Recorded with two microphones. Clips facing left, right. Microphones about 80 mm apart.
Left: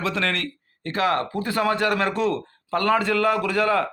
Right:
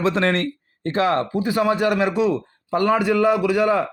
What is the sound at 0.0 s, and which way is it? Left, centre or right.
Speech, right.